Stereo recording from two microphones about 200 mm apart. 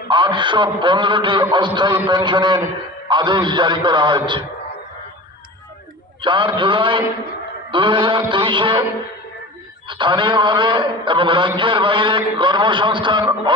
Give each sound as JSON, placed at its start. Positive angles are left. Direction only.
{"t": 0.1, "sound": "a man's voice", "side_deg": -25}
{"t": 6.2, "sound": "a man's voice", "side_deg": -25}
{"t": 9.8, "sound": "a man's voice", "side_deg": -25}